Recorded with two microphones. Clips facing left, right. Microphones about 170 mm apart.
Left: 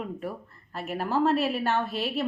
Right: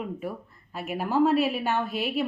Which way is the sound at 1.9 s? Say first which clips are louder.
Right 1 dB; centre (ahead or behind).